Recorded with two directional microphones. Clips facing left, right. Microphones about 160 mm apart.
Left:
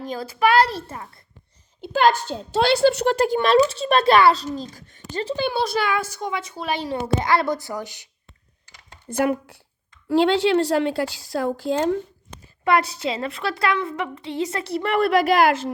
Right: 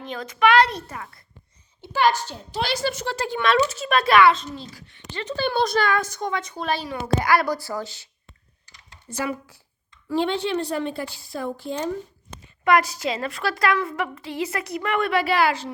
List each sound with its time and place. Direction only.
0.0 s a child's voice: 35° left (ahead or behind)
2.3 s a child's voice: 65° left (ahead or behind); by 5.2 s 45° left (ahead or behind)
5.4 s a woman's voice: 5° left (ahead or behind)
6.7 s a woman's voice: 25° left (ahead or behind)
9.0 s speech: 55° left (ahead or behind)
10.1 s a woman's voice: 85° left
12.6 s a woman's voice: 30° left (ahead or behind); by 15.7 s 45° left (ahead or behind)